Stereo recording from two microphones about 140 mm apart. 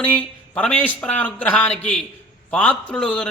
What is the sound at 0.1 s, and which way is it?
A man's voice, 10° left (ahead or behind).